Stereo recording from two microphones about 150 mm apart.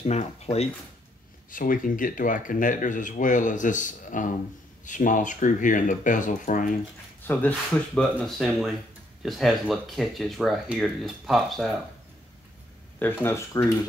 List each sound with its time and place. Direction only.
0.0 s speech: 45° left (ahead or behind)
1.5 s speech: 65° left (ahead or behind)
7.2 s speech: 10° left (ahead or behind)
13.0 s speech: 15° left (ahead or behind)